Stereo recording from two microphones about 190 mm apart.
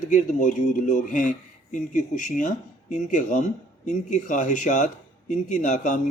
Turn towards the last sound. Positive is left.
turn(degrees=40)  # may be behind; listen again after turning